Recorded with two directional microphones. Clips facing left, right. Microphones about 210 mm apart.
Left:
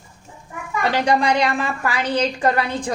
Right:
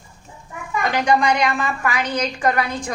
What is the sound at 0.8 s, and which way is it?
A woman's voice, 35° left (ahead or behind).